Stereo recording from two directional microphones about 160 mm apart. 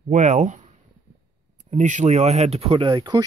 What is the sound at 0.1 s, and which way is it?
Speech, 45° right (ahead or behind).